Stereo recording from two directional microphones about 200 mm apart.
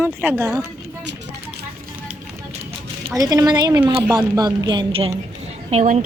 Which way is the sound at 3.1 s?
20° right (ahead or behind).